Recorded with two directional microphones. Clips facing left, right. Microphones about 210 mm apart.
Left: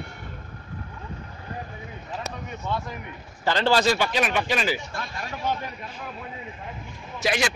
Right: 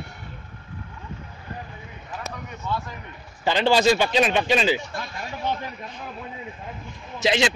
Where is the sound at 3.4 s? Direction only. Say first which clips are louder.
Right 2 dB; 15° right (ahead or behind).